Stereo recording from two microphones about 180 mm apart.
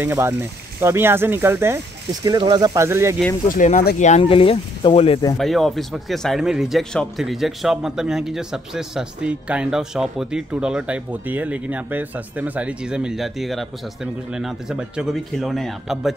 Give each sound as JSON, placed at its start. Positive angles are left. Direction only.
{"t": 0.0, "sound": "speech", "side_deg": -10}
{"t": 2.2, "sound": "speech", "side_deg": -25}
{"t": 3.4, "sound": "speech", "side_deg": 45}
{"t": 5.4, "sound": "a man's voice", "side_deg": 0}